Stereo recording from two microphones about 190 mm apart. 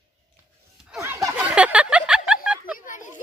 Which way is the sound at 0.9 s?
5° right (ahead or behind).